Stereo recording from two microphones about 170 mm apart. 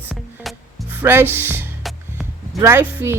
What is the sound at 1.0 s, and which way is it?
Speech, 15° right (ahead or behind).